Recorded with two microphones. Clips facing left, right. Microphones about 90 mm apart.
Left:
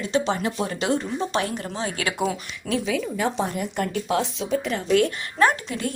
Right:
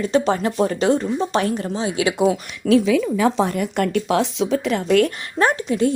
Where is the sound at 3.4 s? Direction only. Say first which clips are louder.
Right 6 dB; 75° right (ahead or behind).